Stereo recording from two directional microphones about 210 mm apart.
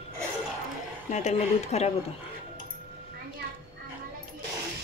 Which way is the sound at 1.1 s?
30° left (ahead or behind).